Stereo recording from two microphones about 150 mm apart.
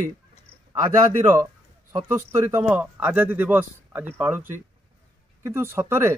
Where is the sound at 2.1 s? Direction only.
15° right (ahead or behind).